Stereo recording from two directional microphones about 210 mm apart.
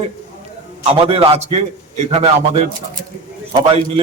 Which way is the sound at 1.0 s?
25° right (ahead or behind).